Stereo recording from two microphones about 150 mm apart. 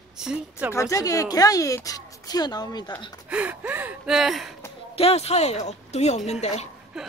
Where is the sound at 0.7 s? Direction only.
20° left (ahead or behind).